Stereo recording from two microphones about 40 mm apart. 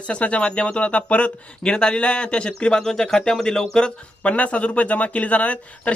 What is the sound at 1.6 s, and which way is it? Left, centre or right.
Speech, left.